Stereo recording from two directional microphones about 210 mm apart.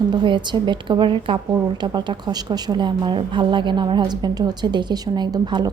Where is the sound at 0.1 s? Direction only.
20° right (ahead or behind).